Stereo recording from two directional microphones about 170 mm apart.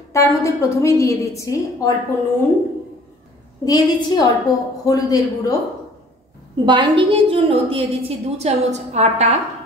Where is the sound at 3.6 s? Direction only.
20° left (ahead or behind).